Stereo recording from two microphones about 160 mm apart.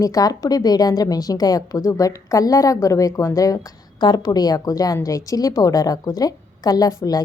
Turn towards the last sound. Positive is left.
turn(degrees=20)  # may be behind; listen again after turning